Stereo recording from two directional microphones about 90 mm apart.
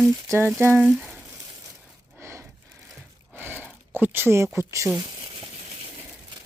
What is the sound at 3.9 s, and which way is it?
Speech, 25° right (ahead or behind).